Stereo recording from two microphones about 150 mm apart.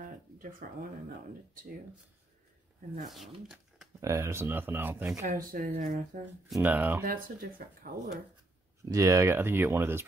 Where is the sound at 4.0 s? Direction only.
20° right (ahead or behind).